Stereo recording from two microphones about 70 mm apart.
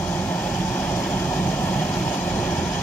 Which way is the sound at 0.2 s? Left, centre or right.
Left.